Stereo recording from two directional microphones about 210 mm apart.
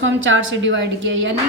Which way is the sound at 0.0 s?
65° right (ahead or behind).